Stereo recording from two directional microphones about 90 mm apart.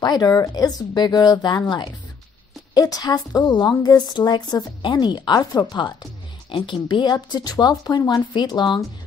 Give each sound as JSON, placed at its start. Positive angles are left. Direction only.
{"t": 0.0, "sound": "a woman's voice", "side_deg": 50}
{"t": 2.7, "sound": "a woman's voice", "side_deg": 45}
{"t": 6.5, "sound": "a woman's voice", "side_deg": 65}